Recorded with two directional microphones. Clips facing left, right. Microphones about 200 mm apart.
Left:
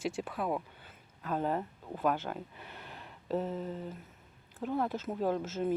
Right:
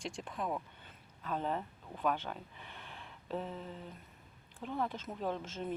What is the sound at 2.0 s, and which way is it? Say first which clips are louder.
Speech: left 3 dB; 10° left (ahead or behind).